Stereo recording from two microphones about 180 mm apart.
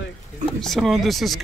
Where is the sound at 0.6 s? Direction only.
Centre (ahead or behind).